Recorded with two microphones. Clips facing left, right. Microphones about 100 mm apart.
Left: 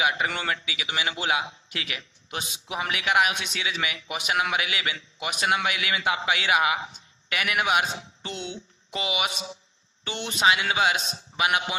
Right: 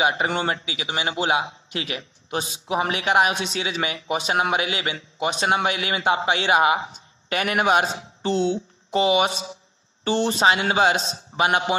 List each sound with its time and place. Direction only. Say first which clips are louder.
0.0 s a man's voice: right 4 dB; 30° right (ahead or behind)